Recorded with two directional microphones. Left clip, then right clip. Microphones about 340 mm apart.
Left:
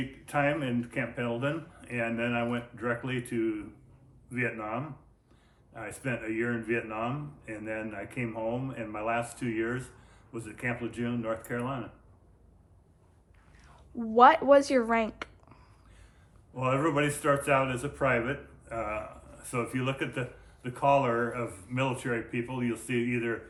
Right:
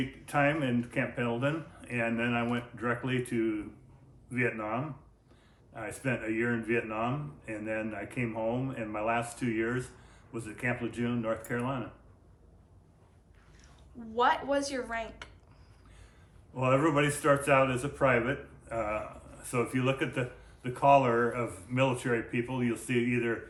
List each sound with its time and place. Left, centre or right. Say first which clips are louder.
0.0 s speech: right 1 dB; centre
14.2 s speech: left 8 dB; centre
16.6 s speech: right 1 dB; centre